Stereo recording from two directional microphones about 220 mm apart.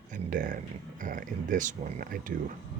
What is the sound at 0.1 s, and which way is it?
Speech, 40° right (ahead or behind).